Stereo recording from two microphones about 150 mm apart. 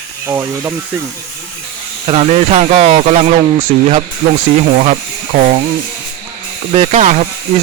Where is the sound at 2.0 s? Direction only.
45° right (ahead or behind).